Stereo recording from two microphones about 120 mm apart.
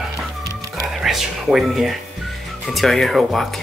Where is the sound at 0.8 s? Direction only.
Centre (ahead or behind).